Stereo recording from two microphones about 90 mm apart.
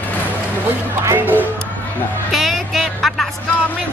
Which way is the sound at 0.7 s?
25° right (ahead or behind).